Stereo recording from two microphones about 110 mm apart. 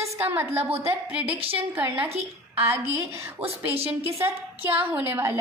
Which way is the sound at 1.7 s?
20° right (ahead or behind).